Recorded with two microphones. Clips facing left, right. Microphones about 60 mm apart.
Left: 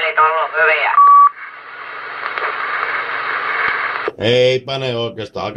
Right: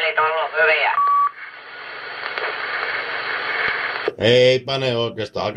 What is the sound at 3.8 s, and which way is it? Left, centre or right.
Speech, left.